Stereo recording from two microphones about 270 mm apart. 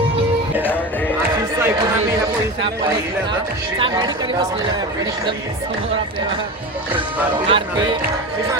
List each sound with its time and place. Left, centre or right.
0.6 s music: centre
1.5 s a sound: centre
3.8 s speech: centre
7.4 s speech: centre